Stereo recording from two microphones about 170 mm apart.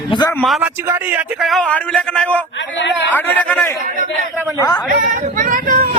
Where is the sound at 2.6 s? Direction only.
90° left.